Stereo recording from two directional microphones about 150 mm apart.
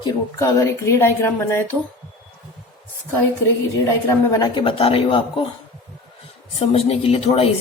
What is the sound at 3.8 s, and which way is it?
Speech, 20° left (ahead or behind).